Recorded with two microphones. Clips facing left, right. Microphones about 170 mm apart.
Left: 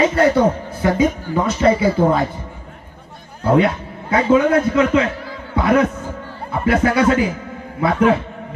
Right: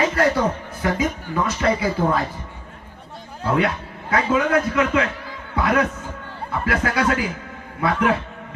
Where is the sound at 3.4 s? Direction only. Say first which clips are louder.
Left 6 dB; 25° left (ahead or behind).